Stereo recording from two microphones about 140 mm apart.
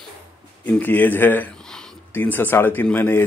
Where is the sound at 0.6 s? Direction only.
10° left (ahead or behind).